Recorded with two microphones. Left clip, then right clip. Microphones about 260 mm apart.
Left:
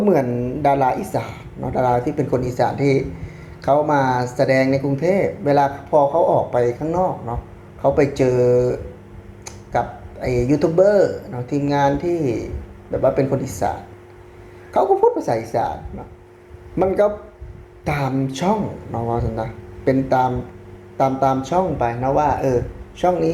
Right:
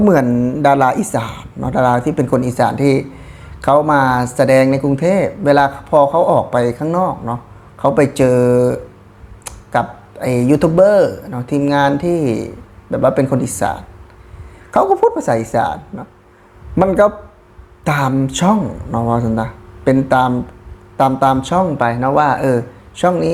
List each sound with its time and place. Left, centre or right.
0.0 s speech: right
9.7 s speech: right
17.8 s speech: right